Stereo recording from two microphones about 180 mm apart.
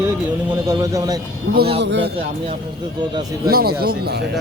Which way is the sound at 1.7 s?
75° right (ahead or behind).